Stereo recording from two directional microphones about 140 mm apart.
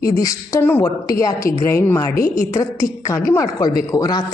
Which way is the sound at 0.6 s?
15° left (ahead or behind).